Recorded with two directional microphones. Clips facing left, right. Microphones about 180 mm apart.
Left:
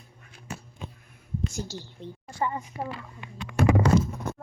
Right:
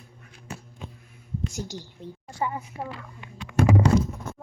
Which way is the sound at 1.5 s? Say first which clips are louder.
Right 1 dB; 15° right (ahead or behind).